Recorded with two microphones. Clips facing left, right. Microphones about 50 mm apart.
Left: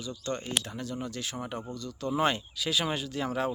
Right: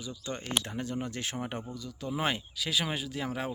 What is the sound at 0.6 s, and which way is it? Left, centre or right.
Speech, right.